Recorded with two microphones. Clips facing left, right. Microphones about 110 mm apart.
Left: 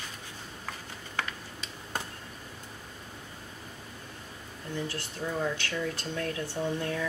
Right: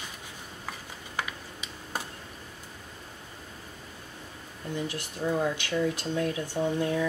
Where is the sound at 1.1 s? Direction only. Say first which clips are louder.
Right 1 dB; 10° right (ahead or behind).